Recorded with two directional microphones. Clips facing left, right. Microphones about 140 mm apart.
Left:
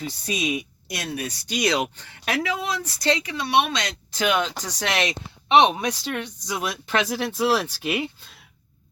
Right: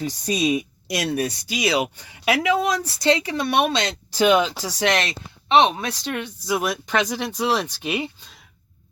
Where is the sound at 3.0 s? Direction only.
30° right (ahead or behind).